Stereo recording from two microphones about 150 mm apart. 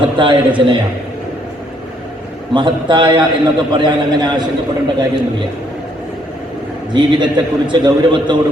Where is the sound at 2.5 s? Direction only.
30° right (ahead or behind).